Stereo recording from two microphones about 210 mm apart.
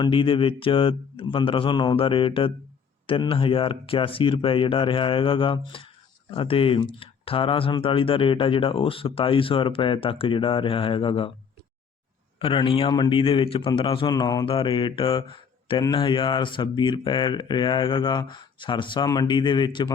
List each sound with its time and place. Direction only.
0.0 s a man's voice: 25° left (ahead or behind)
12.4 s a man's voice: 25° left (ahead or behind)